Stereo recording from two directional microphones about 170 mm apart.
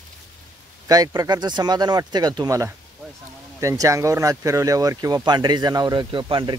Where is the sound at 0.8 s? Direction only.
20° right (ahead or behind).